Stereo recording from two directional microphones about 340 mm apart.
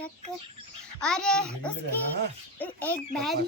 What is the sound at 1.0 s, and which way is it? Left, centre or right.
A child's voice, centre.